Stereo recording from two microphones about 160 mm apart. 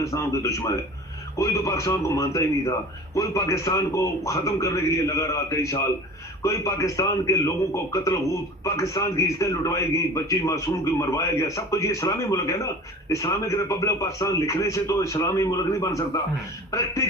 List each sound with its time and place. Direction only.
0.0 s a man's voice: 20° left (ahead or behind)